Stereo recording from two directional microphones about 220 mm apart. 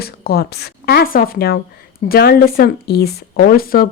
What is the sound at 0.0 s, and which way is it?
Speech, 45° left (ahead or behind).